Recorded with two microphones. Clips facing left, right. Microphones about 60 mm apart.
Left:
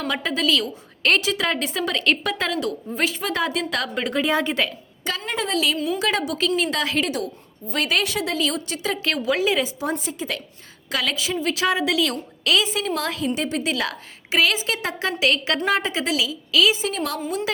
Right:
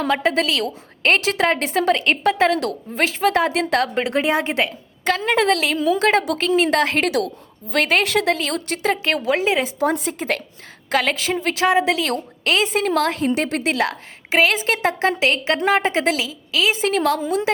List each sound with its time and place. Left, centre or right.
0.2 s a woman's voice: right
4.0 s a woman's voice: right
5.2 s a woman's voice: right
5.6 s a woman's voice: right
9.0 s a woman's voice: right
9.9 s a woman's voice: right
12.6 s a woman's voice: right
13.7 s a woman's voice: right